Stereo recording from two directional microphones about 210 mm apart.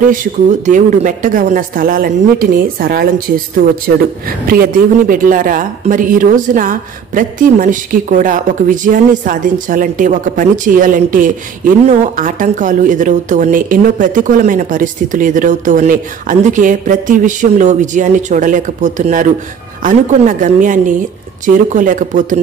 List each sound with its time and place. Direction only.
0.0 s a man's voice: 40° right (ahead or behind)